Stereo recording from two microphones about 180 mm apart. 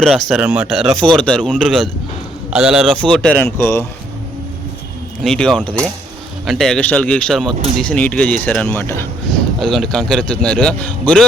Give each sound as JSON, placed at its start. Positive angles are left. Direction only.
{"t": 0.0, "sound": "a man's voice", "side_deg": 0}
{"t": 5.2, "sound": "a man's voice", "side_deg": 0}
{"t": 9.6, "sound": "a man's voice", "side_deg": 0}